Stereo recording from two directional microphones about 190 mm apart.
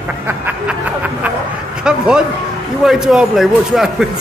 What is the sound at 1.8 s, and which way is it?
A man's voice, 5° right (ahead or behind).